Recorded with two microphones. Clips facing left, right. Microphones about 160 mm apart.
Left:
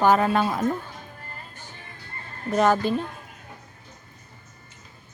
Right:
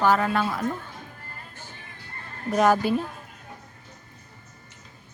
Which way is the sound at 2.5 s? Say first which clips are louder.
Even; 5° right (ahead or behind).